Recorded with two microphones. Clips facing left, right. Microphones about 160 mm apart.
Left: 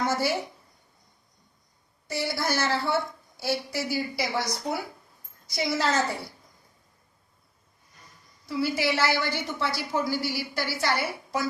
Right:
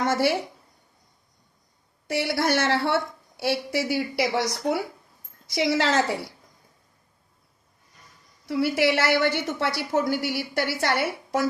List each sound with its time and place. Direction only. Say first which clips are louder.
0.0 s a woman's voice: right 4 dB; 75° right (ahead or behind)
2.0 s a woman's voice: right 5 dB; 75° right (ahead or behind)
5.5 s a woman's voice: right 4 dB; 90° right
8.4 s a woman's voice: right 4 dB; 65° right (ahead or behind)